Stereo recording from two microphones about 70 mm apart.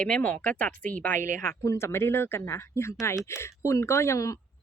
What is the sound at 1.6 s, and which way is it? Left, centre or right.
Speech, left.